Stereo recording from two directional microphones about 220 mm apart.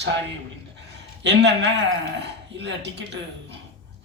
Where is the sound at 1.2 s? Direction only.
50° right (ahead or behind).